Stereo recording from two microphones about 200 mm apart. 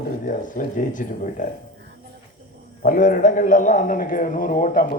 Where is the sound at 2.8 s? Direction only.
40° left (ahead or behind).